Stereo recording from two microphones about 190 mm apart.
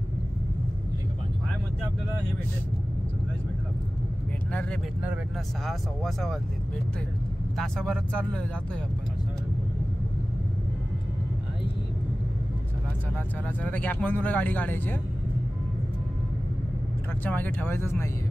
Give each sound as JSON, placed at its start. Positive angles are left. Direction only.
{"t": 4.5, "sound": "speech", "side_deg": 5}
{"t": 7.5, "sound": "speech", "side_deg": 5}
{"t": 13.6, "sound": "speech", "side_deg": 10}
{"t": 17.2, "sound": "speech", "side_deg": 10}